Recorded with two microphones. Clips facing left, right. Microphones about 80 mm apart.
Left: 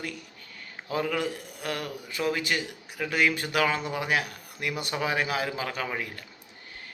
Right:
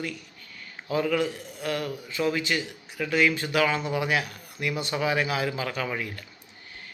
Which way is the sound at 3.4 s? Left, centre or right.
Left.